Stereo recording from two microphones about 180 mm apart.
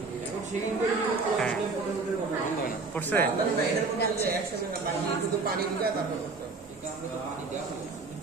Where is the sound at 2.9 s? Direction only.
10° left (ahead or behind).